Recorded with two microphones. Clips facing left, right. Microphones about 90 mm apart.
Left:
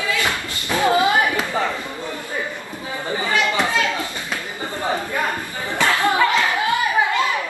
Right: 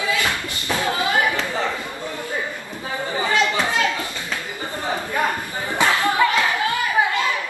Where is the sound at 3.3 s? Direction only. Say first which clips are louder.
Even; 20° right (ahead or behind).